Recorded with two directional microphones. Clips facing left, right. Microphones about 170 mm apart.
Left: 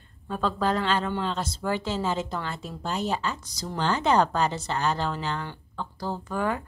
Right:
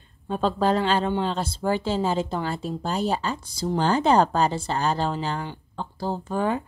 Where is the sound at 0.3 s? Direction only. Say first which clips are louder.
Right 4 dB; 30° right (ahead or behind).